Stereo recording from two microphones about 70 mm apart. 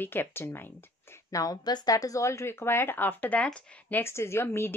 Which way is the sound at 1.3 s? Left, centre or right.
Left.